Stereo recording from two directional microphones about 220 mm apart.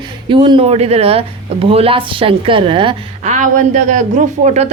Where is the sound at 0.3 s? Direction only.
20° right (ahead or behind).